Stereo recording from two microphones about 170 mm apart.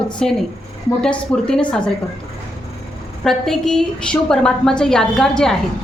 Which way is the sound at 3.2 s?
5° left (ahead or behind).